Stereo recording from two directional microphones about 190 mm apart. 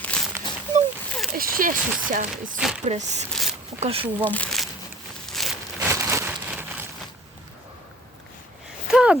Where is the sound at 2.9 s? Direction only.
35° right (ahead or behind).